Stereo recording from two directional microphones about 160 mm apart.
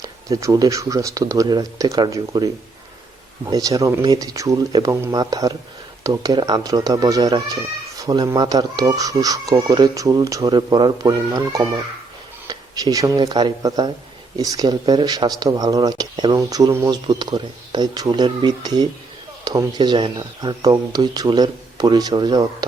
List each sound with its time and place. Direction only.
0.0 s speech: 20° right (ahead or behind)
3.5 s speech: 20° right (ahead or behind)